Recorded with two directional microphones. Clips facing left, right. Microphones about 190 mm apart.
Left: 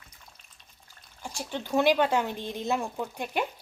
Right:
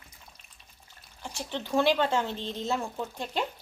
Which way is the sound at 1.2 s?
10° left (ahead or behind).